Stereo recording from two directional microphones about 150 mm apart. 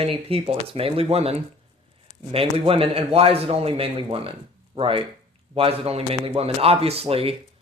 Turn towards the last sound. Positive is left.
turn(degrees=-40)  # may be behind; listen again after turning